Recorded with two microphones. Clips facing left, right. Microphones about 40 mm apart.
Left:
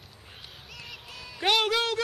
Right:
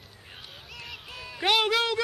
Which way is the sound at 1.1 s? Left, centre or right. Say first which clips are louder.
Right 3 dB; centre.